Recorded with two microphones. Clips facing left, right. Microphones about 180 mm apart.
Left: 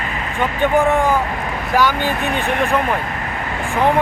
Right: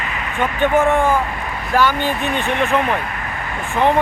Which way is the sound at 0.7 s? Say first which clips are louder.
Even; 15° left (ahead or behind).